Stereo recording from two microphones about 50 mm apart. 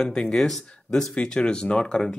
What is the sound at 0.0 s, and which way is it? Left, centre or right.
Speech, centre.